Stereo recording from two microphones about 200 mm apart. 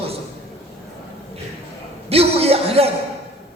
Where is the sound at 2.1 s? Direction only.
30° right (ahead or behind).